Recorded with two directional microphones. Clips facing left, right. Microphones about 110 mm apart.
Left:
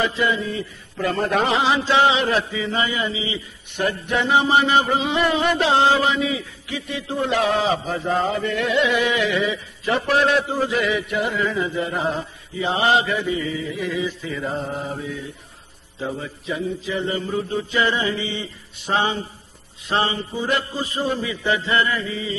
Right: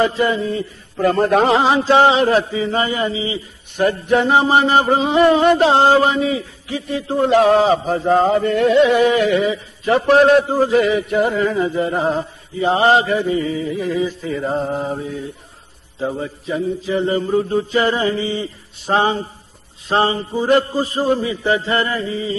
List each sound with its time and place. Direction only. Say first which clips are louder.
0.0 s a man's voice: right 5 dB; 40° right (ahead or behind)